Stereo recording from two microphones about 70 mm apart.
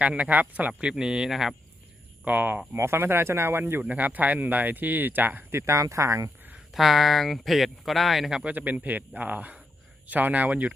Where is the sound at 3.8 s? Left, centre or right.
Right.